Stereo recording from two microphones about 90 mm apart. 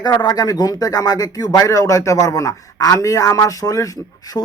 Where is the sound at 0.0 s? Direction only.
45° left (ahead or behind).